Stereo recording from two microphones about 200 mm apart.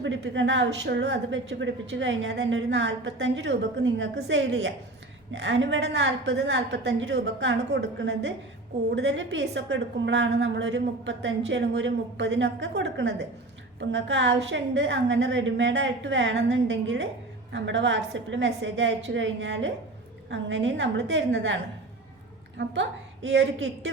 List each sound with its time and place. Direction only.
0.0 s a woman's voice: 65° right (ahead or behind)